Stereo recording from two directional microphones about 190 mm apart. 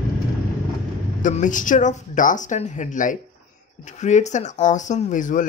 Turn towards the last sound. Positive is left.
turn(degrees=40)  # may be behind; listen again after turning